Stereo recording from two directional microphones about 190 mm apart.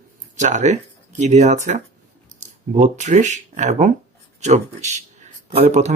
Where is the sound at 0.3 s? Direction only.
40° right (ahead or behind).